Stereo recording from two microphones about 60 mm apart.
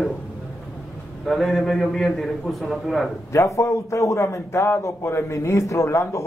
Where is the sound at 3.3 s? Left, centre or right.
Left.